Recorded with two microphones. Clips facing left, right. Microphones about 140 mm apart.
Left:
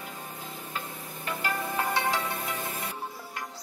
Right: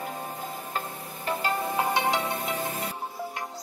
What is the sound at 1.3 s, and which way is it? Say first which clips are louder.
Music: right 4 dB; 30° right (ahead or behind).